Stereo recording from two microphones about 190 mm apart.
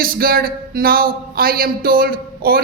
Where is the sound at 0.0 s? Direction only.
50° right (ahead or behind).